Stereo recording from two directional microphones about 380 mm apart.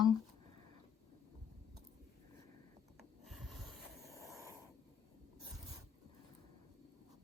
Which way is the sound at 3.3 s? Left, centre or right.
Centre.